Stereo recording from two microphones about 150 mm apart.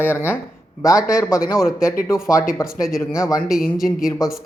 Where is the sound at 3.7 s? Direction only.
Centre (ahead or behind).